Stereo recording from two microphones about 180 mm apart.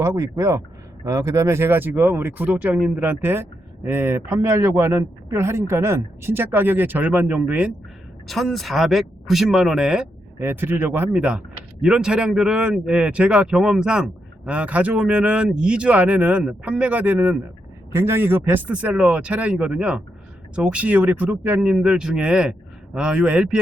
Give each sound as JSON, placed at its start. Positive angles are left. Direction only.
{"t": 0.0, "sound": "a man's voice", "side_deg": -15}